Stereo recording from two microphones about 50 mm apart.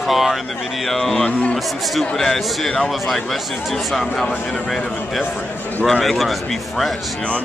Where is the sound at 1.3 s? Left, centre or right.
Left.